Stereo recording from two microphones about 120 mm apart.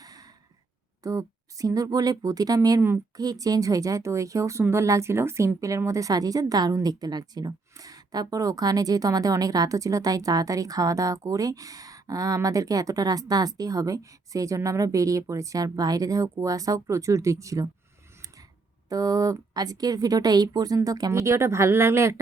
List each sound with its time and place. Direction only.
0.0 s a sound: 30° right (ahead or behind)
1.0 s a woman's voice: 30° right (ahead or behind)
18.9 s speech: 30° right (ahead or behind)